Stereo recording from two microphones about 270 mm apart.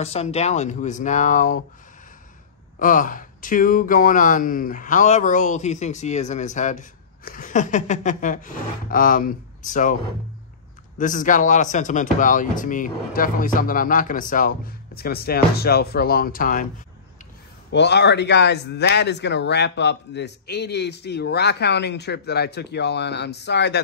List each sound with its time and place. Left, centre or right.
0.0 s speech: left
2.8 s speech: left
11.0 s speech: left
17.6 s speech: left